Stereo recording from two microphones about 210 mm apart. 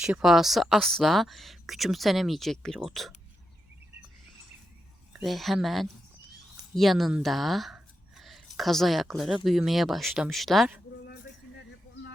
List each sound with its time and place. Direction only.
0.0 s speech: 5° right (ahead or behind)
5.1 s speech: centre (ahead or behind)